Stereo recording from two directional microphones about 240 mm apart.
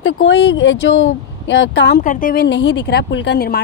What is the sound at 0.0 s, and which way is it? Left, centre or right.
Speech, left.